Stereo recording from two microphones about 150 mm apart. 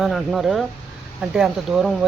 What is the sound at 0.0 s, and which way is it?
Speech, centre (ahead or behind).